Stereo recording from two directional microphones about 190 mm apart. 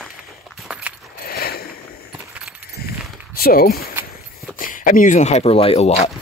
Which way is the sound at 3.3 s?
50° left (ahead or behind).